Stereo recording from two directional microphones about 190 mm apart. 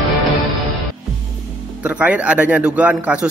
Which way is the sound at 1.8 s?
10° right (ahead or behind).